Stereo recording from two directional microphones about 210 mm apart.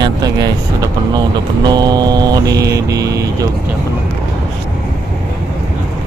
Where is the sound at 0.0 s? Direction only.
20° right (ahead or behind).